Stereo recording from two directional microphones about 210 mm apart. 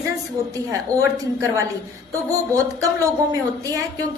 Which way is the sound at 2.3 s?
15° right (ahead or behind).